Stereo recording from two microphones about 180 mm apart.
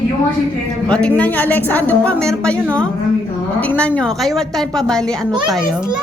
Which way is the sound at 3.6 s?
10° left (ahead or behind).